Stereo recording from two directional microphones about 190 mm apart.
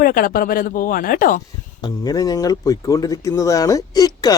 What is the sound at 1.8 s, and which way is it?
Speech, 20° left (ahead or behind).